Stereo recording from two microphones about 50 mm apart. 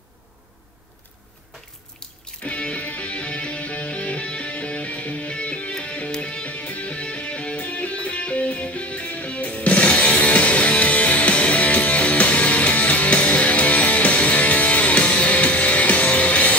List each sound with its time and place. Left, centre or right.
2.4 s music: left